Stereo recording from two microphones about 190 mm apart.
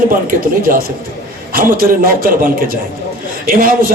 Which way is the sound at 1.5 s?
50° right (ahead or behind).